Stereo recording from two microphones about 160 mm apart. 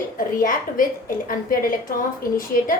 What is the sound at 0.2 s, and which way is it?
A woman's voice, 60° left (ahead or behind).